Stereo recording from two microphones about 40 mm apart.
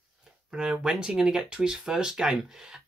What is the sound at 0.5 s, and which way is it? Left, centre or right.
Speech, centre.